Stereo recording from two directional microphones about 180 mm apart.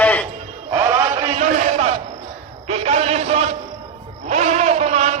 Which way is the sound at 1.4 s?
45° right (ahead or behind).